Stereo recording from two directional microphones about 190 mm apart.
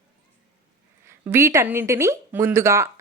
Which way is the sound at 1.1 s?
15° right (ahead or behind).